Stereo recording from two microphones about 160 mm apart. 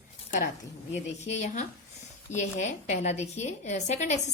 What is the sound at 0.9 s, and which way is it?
A woman's voice, 45° left (ahead or behind).